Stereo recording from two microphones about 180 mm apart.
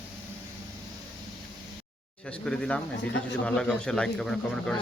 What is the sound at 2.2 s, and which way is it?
Speech, 5° left (ahead or behind).